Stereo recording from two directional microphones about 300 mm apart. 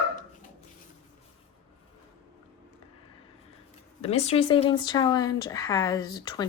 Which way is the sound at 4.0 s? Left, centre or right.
Left.